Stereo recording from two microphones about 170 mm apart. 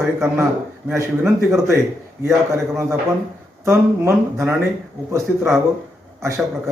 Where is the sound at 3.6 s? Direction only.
15° right (ahead or behind).